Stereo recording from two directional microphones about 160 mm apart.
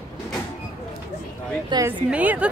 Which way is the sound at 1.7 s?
25° right (ahead or behind).